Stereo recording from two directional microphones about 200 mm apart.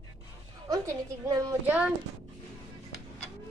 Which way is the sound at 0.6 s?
20° right (ahead or behind).